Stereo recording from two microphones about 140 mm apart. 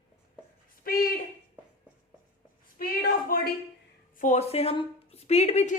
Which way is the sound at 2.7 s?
75° left (ahead or behind).